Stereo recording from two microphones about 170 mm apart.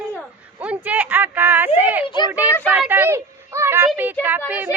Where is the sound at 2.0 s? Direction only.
25° left (ahead or behind).